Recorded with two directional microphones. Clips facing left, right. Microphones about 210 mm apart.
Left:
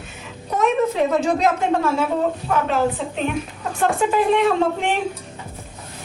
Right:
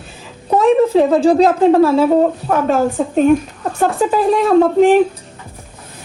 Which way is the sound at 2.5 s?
45° right (ahead or behind).